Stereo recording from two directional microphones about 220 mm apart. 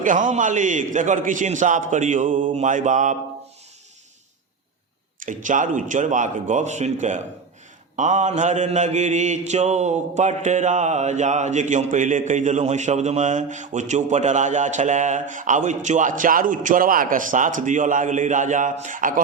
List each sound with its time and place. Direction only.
0.0 s mantra: 35° right (ahead or behind)
5.2 s mantra: 35° right (ahead or behind)